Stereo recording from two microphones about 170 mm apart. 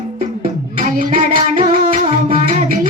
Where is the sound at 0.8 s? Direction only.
55° right (ahead or behind).